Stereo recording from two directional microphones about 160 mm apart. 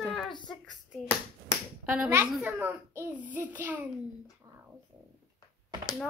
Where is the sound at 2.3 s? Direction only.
10° right (ahead or behind).